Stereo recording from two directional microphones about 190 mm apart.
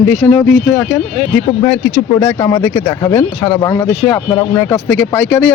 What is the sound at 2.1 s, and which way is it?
Speech, 15° left (ahead or behind).